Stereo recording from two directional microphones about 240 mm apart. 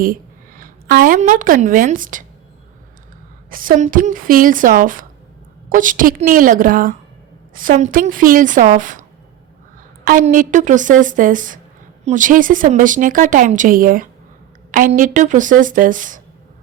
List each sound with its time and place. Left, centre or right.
0.0 s a woman's voice: right
3.5 s speech: right